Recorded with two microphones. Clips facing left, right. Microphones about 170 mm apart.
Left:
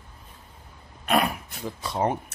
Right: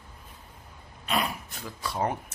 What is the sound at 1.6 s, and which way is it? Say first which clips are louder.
Speech: left 4 dB; 20° left (ahead or behind).